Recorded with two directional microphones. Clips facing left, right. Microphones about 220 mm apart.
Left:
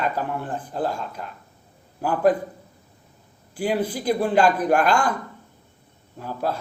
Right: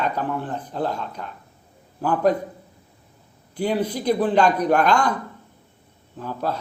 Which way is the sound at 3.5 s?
10° left (ahead or behind).